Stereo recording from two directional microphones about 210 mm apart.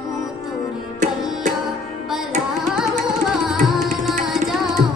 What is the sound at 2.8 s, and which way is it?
Music, centre (ahead or behind).